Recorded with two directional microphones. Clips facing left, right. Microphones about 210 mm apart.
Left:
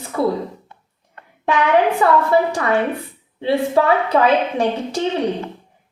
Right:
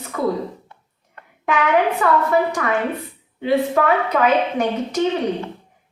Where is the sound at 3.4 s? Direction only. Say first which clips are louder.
Left 1 dB; 30° left (ahead or behind).